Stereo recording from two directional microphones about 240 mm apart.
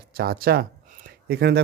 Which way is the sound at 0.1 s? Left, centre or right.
Right.